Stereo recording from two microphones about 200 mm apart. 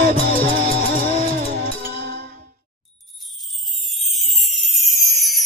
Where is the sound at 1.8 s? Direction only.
50° right (ahead or behind).